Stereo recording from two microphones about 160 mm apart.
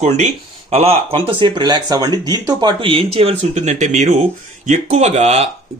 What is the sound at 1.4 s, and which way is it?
Speech, 25° right (ahead or behind).